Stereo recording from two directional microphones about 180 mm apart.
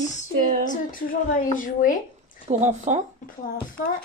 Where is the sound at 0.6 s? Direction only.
45° left (ahead or behind).